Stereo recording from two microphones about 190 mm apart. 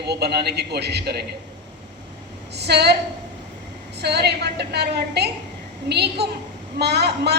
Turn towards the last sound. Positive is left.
turn(degrees=-60)  # may be behind; listen again after turning